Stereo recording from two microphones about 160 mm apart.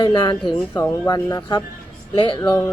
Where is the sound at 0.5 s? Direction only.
15° left (ahead or behind).